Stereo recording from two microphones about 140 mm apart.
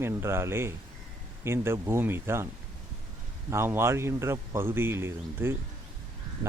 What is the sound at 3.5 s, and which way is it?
Speech, 20° right (ahead or behind).